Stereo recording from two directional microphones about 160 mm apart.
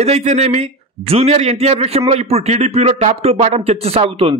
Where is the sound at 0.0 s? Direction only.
45° right (ahead or behind).